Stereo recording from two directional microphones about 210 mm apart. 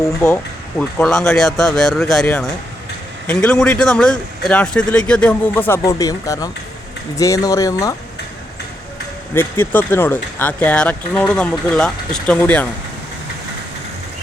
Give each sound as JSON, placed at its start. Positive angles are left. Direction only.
{"t": 0.8, "sound": "speech", "side_deg": 5}
{"t": 9.3, "sound": "speech", "side_deg": 10}